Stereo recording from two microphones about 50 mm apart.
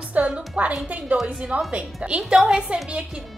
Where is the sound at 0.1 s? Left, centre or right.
Right.